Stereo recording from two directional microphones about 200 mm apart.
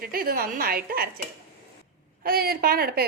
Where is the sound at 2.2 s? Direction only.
50° right (ahead or behind).